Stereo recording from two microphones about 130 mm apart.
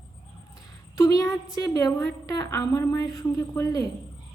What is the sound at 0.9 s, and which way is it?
A woman's voice, 25° left (ahead or behind).